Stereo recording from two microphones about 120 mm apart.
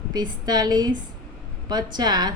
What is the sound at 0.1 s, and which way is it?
Speech, 35° right (ahead or behind).